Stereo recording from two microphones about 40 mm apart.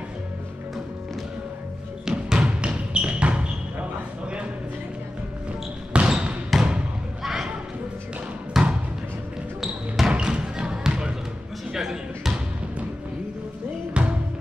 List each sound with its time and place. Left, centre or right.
2.0 s music: centre
2.6 s basketball bounce: right
6.0 s trickle: right
6.5 s trickle: centre
8.5 s music: centre
9.6 s basketball bounce: centre
10.1 s music: right
11.7 s basketball bounce: centre
14.0 s music: right